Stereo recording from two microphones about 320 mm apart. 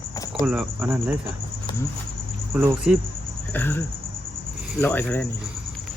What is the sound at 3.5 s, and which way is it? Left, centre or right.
Speech, centre.